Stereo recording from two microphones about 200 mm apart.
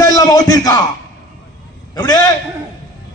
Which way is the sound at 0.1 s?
20° left (ahead or behind).